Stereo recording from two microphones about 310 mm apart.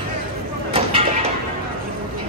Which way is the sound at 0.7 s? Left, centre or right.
Centre.